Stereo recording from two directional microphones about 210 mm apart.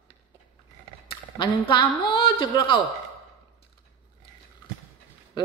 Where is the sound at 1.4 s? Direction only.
20° left (ahead or behind).